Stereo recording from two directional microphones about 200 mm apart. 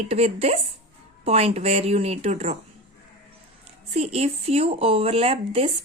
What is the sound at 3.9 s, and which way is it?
Speech, 30° right (ahead or behind).